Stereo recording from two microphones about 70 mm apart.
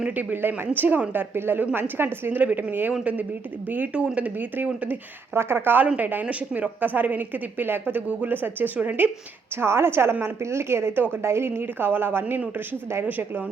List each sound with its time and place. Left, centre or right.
0.2 s a woman's voice: right
9.6 s a woman's voice: right